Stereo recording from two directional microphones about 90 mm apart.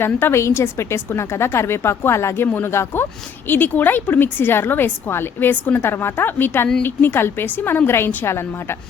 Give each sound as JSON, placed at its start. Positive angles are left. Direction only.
{"t": 0.0, "sound": "a woman's voice", "side_deg": 25}